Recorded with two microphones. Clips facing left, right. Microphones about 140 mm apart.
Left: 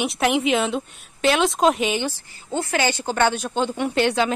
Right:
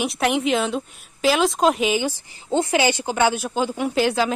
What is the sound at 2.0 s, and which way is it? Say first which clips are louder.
A woman's voice: right 3 dB; 15° right (ahead or behind).